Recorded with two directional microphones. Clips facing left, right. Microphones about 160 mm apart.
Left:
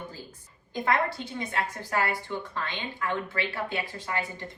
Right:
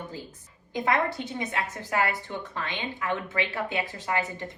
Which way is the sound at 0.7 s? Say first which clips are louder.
Right 1 dB; 20° right (ahead or behind).